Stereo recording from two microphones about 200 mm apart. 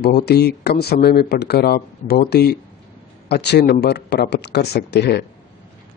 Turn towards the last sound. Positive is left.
turn(degrees=55)  # may be behind; listen again after turning